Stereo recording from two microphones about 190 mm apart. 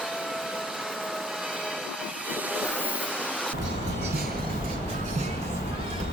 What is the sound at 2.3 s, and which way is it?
Train, 5° right (ahead or behind).